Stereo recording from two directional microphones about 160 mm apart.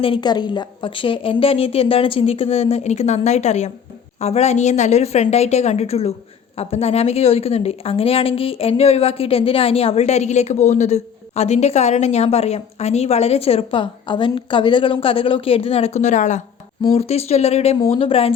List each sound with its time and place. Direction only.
0.0 s a woman's voice: 30° left (ahead or behind); by 16.4 s 50° left (ahead or behind)
16.8 s a woman's voice: 40° left (ahead or behind)